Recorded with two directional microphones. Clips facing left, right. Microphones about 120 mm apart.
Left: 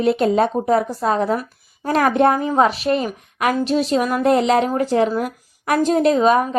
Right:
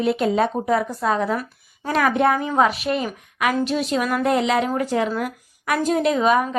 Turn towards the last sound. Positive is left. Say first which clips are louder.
# left 3 dB
turn(degrees=35)  # may be behind; listen again after turning